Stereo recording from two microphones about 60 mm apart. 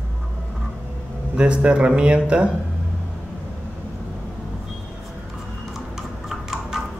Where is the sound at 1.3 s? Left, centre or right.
Centre.